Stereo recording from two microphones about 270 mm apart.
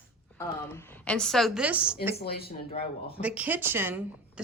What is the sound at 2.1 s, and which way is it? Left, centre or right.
Speech, left.